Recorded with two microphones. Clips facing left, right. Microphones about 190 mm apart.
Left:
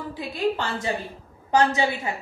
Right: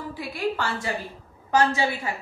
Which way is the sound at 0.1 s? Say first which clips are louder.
Left 3 dB; 20° left (ahead or behind).